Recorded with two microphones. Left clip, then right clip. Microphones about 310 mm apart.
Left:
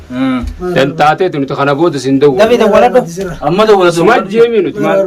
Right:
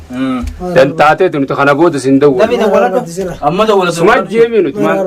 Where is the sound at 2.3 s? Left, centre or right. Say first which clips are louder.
Left 3 dB; left.